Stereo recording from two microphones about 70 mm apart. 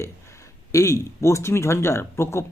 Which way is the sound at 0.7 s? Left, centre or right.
Left.